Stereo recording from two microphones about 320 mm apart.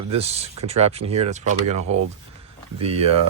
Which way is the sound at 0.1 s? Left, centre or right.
Centre.